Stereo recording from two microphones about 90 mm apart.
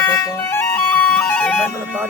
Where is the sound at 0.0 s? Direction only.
25° left (ahead or behind).